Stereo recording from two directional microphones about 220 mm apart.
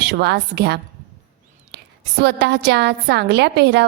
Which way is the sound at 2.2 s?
50° right (ahead or behind).